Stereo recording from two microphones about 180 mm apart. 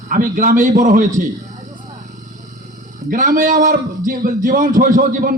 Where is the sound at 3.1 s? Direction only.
50° right (ahead or behind).